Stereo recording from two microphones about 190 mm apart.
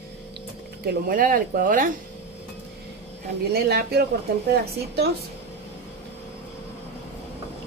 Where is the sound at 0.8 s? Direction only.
50° right (ahead or behind).